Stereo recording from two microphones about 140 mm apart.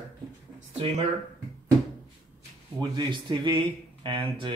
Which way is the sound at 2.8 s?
35° right (ahead or behind).